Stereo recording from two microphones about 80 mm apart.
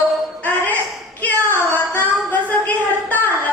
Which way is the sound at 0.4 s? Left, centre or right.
Left.